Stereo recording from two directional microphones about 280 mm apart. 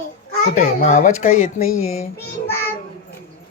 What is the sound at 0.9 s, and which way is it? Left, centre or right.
Speech, left.